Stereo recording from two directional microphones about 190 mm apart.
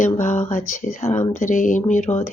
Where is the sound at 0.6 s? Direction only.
45° left (ahead or behind).